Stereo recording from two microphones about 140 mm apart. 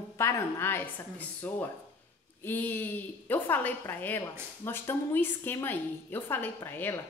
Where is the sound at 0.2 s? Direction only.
15° left (ahead or behind).